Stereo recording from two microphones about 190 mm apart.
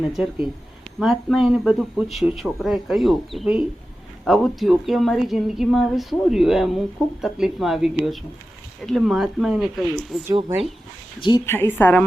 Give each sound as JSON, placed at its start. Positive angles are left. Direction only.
{"t": 0.0, "sound": "a woman's voice", "side_deg": -5}
{"t": 11.2, "sound": "a woman's voice", "side_deg": 25}
{"t": 11.4, "sound": "a woman's voice", "side_deg": 10}